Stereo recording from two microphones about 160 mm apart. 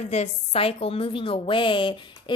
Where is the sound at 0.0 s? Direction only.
40° left (ahead or behind).